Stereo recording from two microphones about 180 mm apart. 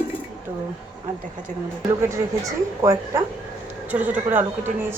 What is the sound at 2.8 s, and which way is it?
A woman's voice, 15° right (ahead or behind).